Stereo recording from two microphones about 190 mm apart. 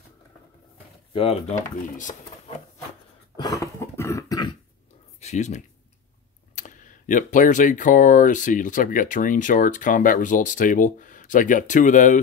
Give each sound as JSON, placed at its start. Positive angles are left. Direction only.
{"t": 1.1, "sound": "speech", "side_deg": 30}
{"t": 3.3, "sound": "cough", "side_deg": 15}
{"t": 5.2, "sound": "speech", "side_deg": 35}